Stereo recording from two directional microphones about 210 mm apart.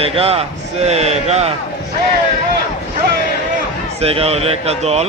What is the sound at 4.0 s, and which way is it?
Speech, 30° right (ahead or behind).